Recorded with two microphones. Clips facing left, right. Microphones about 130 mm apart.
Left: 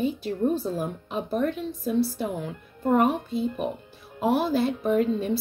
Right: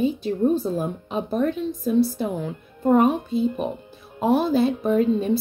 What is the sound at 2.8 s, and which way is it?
A woman's voice, 20° right (ahead or behind).